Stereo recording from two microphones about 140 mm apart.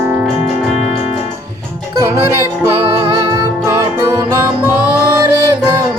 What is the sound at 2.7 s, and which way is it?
Music, 35° right (ahead or behind).